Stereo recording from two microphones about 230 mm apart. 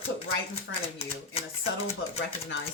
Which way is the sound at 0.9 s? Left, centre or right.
Left.